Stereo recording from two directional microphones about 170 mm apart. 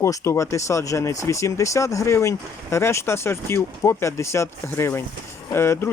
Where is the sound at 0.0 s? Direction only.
15° left (ahead or behind).